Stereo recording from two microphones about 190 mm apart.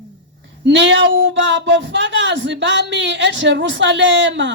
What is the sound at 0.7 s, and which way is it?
Speech, 70° right (ahead or behind).